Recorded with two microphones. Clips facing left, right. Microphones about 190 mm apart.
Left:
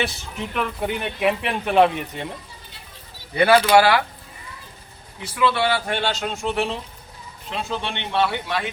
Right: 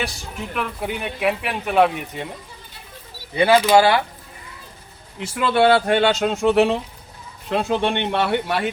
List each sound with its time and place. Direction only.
0.5 s speech: 5° right (ahead or behind)
3.3 s speech: 15° right (ahead or behind)
5.2 s speech: 45° right (ahead or behind); by 6.7 s 65° right (ahead or behind)
7.5 s speech: 55° right (ahead or behind)